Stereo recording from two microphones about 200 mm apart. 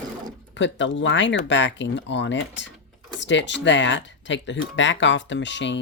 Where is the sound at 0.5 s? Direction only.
65° left (ahead or behind).